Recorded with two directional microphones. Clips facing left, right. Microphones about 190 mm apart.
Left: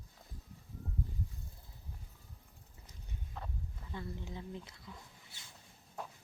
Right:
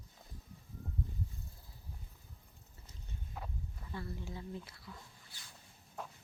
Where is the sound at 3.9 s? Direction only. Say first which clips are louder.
Even; 20° left (ahead or behind).